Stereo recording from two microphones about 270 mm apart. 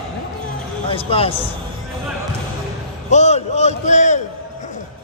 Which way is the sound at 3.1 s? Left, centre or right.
Left.